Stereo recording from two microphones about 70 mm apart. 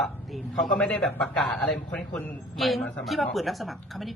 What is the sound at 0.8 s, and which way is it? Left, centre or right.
Speech, centre.